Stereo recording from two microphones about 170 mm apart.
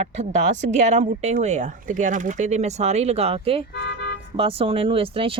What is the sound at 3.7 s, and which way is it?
Speech, 85° left.